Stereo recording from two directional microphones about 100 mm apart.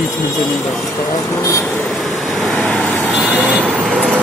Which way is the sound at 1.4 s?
30° left (ahead or behind).